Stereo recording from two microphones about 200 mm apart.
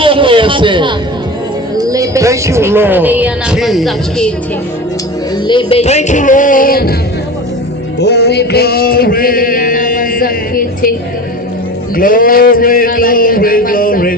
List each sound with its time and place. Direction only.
0.0 s a sound: 25° right (ahead or behind)
1.8 s speech: 15° right (ahead or behind); by 4.3 s centre (ahead or behind)
5.5 s speech: 25° left (ahead or behind); by 6.9 s 45° left (ahead or behind)
7.9 s male singing: 55° left (ahead or behind)
11.9 s a man's voice: 45° left (ahead or behind)